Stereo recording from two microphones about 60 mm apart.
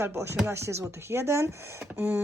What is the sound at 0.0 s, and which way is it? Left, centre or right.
Speech, right.